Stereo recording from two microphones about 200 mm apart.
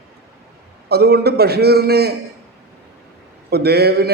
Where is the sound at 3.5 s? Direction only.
55° right (ahead or behind).